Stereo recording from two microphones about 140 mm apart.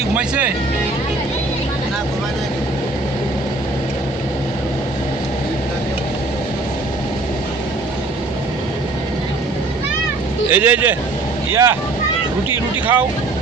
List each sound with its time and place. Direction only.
0.2 s speech: 10° right (ahead or behind)
10.5 s speech: 10° right (ahead or behind)
12.5 s a sound: 15° right (ahead or behind)